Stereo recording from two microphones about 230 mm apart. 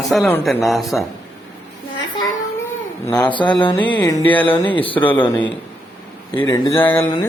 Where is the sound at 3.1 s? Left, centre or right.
Centre.